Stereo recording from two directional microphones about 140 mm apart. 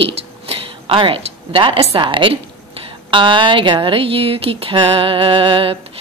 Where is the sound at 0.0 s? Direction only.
40° right (ahead or behind).